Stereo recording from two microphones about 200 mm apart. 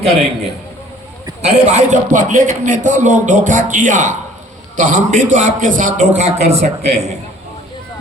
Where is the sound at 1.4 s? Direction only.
35° right (ahead or behind).